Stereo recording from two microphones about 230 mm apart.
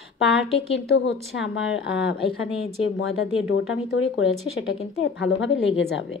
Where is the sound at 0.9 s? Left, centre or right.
Left.